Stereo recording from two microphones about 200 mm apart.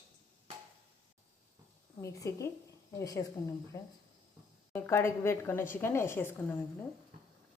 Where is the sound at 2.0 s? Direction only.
15° left (ahead or behind).